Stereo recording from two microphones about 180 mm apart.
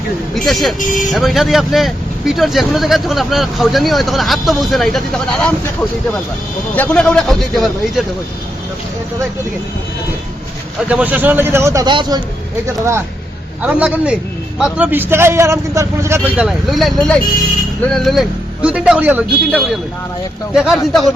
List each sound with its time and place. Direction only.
0.3 s speech: centre (ahead or behind)
0.8 s speech: 45° left (ahead or behind)
1.1 s speech: centre (ahead or behind)
6.7 s speech: 5° left (ahead or behind)
10.8 s a man's voice: 10° right (ahead or behind)